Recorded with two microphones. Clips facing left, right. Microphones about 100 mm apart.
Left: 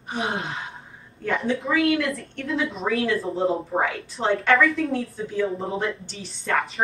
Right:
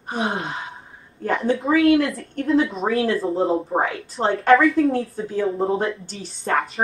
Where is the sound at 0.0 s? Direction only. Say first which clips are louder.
Right 3 dB; 35° right (ahead or behind).